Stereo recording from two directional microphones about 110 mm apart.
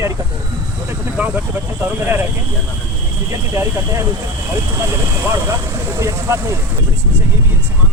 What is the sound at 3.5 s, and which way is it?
Speech, 25° right (ahead or behind).